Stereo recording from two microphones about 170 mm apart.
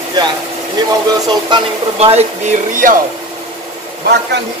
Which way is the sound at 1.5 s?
25° right (ahead or behind).